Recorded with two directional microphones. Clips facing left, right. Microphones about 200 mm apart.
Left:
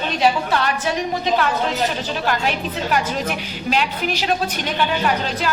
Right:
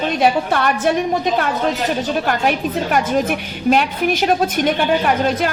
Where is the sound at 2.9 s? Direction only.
50° right (ahead or behind).